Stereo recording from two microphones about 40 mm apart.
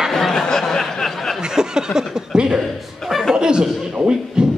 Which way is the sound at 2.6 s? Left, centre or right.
Centre.